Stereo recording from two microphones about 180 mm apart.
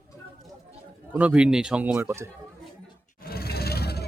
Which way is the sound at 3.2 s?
55° left (ahead or behind).